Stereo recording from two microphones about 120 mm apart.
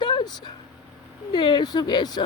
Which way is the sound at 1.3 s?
40° left (ahead or behind).